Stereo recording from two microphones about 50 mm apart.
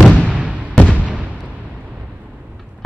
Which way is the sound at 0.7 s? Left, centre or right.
Centre.